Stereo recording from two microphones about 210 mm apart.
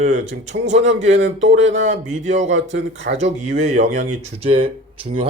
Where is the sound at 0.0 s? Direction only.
35° right (ahead or behind).